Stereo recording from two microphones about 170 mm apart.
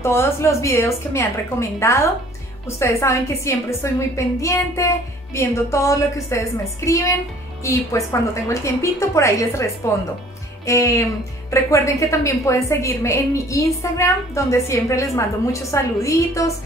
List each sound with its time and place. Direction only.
0.0 s a woman's voice: 15° left (ahead or behind)